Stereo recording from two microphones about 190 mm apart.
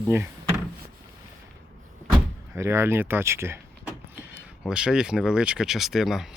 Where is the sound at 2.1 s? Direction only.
10° right (ahead or behind).